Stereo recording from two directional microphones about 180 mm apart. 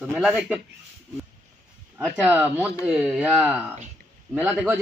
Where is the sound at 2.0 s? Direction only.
10° right (ahead or behind).